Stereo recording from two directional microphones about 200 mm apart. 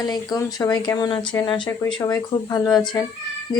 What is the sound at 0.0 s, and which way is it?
Speech, 20° left (ahead or behind).